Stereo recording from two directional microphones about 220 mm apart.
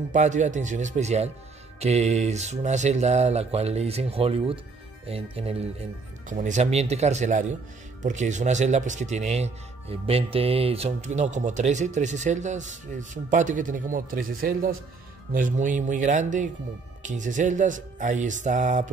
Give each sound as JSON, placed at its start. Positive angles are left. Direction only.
{"t": 0.1, "sound": "speech", "side_deg": -35}